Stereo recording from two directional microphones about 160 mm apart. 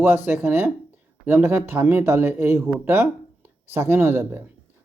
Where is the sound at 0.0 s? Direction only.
15° right (ahead or behind).